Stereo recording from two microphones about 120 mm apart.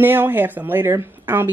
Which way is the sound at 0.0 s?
15° right (ahead or behind).